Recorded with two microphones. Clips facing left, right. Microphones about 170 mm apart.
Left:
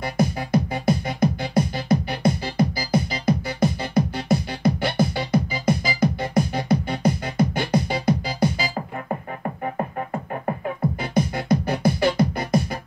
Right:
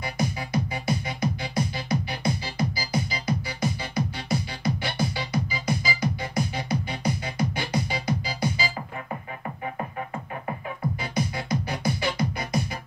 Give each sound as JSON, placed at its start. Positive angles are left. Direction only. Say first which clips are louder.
{"t": 0.2, "sound": "music", "louder": "left 7 dB", "side_deg": 50}
{"t": 11.0, "sound": "music", "louder": "left 6 dB", "side_deg": 50}